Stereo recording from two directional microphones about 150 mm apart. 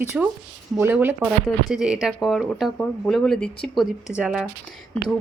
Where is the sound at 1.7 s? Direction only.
5° right (ahead or behind).